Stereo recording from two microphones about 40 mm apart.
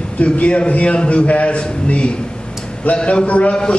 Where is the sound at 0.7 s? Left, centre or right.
Left.